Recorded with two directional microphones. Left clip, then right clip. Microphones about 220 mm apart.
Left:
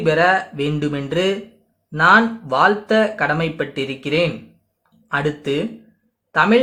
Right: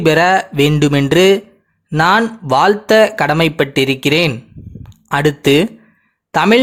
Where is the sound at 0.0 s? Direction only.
45° right (ahead or behind).